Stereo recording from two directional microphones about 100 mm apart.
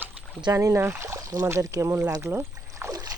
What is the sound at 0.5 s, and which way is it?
Speech, 35° right (ahead or behind).